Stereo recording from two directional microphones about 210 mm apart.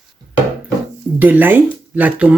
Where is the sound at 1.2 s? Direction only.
10° right (ahead or behind).